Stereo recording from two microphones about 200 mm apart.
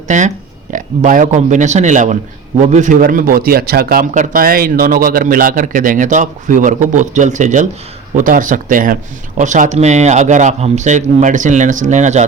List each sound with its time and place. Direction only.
0.1 s a man's voice: 40° right (ahead or behind)